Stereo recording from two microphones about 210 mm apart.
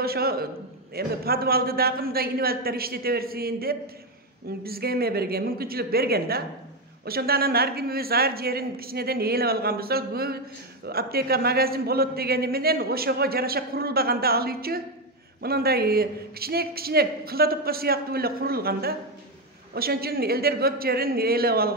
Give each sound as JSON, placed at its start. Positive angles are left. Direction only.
{"t": 0.0, "sound": "a man's voice", "side_deg": -45}